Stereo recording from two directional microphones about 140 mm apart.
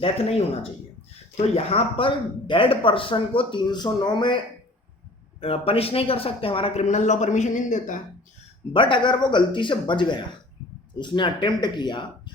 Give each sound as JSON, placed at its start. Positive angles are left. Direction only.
{"t": 0.0, "sound": "speech", "side_deg": 45}
{"t": 5.4, "sound": "speech", "side_deg": 45}
{"t": 8.7, "sound": "speech", "side_deg": 35}